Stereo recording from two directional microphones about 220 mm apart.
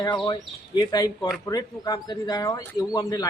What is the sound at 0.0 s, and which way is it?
Speech, 20° left (ahead or behind).